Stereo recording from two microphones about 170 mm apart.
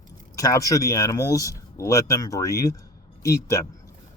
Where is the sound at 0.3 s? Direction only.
20° left (ahead or behind).